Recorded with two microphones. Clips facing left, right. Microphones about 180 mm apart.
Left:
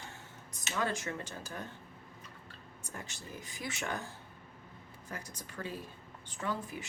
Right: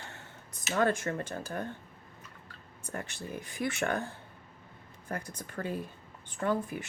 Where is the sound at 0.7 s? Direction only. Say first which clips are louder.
Right 7 dB; 50° right (ahead or behind).